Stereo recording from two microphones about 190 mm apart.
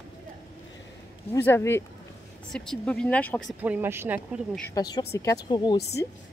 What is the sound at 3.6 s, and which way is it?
Speech, 10° right (ahead or behind).